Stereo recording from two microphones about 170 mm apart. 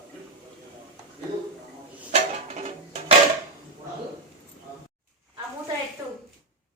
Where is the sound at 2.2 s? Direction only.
40° right (ahead or behind).